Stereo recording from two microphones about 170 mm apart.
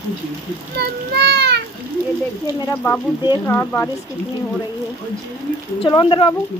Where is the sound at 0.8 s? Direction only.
75° right (ahead or behind).